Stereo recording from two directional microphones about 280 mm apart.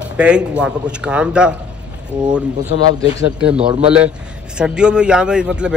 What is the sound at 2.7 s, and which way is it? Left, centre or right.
Speech, left.